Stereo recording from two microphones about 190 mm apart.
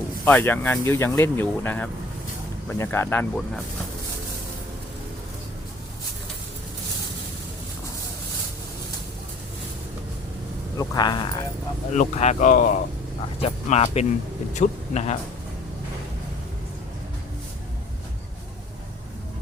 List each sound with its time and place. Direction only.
0.3 s speech: 10° left (ahead or behind)
10.8 s speech: 20° left (ahead or behind)
11.9 s speech: 35° left (ahead or behind)